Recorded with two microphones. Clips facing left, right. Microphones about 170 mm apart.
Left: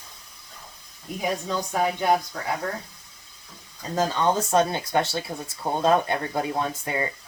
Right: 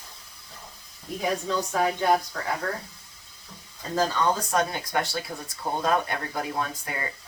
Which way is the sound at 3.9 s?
25° left (ahead or behind).